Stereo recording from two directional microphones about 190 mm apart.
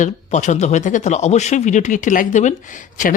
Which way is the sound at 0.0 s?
40° left (ahead or behind).